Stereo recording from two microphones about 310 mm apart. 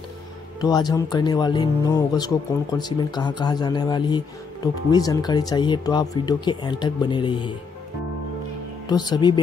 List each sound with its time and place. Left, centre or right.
0.6 s speech: centre
8.8 s speech: centre